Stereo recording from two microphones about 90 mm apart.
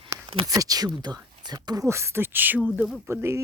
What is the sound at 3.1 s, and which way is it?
Speech, 30° right (ahead or behind).